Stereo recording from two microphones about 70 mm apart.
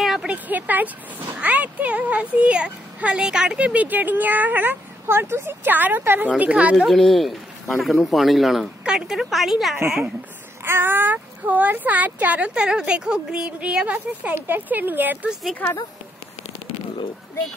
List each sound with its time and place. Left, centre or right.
0.0 s a sound: centre
0.3 s speech: right
6.9 s speech: centre
10.6 s speech: right
15.6 s speech: centre